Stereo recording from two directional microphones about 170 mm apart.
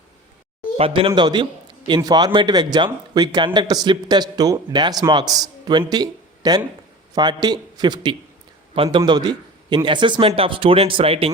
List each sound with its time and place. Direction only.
0.8 s a man's voice: 30° right (ahead or behind)